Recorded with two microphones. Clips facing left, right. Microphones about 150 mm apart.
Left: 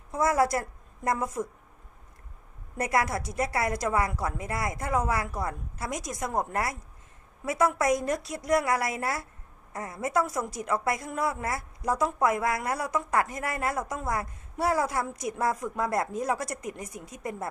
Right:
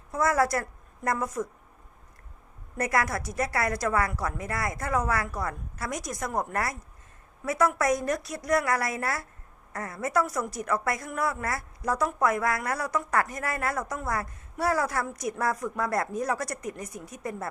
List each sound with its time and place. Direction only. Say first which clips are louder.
0.1 s a woman's voice: even; 20° left (ahead or behind)
2.7 s a woman's voice: even; 20° left (ahead or behind)